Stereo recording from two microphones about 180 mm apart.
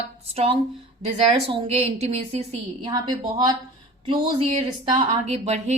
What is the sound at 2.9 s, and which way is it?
A woman's voice, 20° right (ahead or behind).